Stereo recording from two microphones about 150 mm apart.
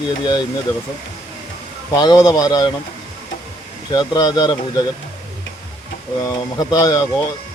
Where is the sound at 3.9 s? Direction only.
25° left (ahead or behind).